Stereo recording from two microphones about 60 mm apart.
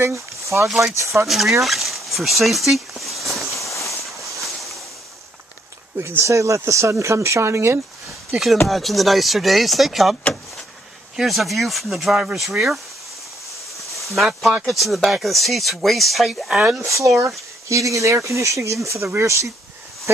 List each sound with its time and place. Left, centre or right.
0.0 s speech: right
1.2 s speech: centre
1.6 s a sound: centre
4.4 s boat: centre
5.9 s speech: right
8.6 s speech: centre
11.1 s speech: centre
13.8 s a sound: centre
14.7 s speech: centre
16.5 s speech: centre
16.8 s speech: right
18.9 s speech: right